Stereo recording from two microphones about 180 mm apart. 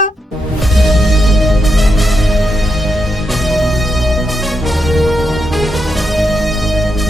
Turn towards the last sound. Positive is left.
turn(degrees=0)  # may be behind; listen again after turning